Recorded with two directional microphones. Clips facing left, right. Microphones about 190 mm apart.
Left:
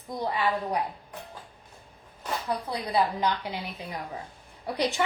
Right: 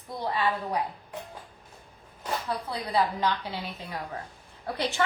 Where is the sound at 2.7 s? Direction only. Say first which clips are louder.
Even; 15° left (ahead or behind).